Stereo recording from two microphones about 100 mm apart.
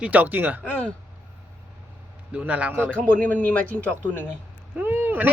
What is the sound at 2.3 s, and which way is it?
Speech, 15° right (ahead or behind).